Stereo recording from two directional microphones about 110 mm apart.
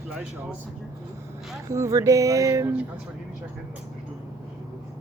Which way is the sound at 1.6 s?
25° right (ahead or behind).